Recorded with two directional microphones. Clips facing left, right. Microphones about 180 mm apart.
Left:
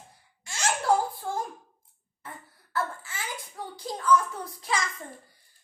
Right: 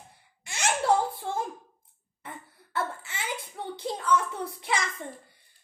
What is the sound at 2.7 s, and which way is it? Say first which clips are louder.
A child's voice: even; 25° right (ahead or behind).